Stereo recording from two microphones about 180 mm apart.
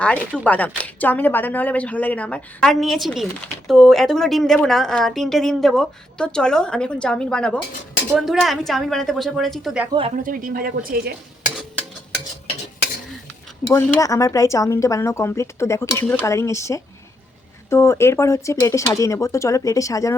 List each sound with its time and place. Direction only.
0.3 s a woman's voice: 10° left (ahead or behind)
10.2 s speech: 55° right (ahead or behind)
13.7 s speech: 15° left (ahead or behind)